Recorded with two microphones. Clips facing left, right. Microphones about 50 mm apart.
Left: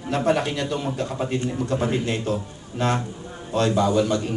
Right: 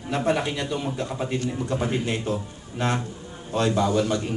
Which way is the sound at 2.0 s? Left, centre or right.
Centre.